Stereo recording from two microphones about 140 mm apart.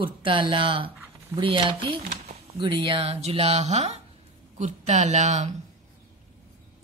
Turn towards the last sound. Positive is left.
turn(degrees=-55)  # may be behind; listen again after turning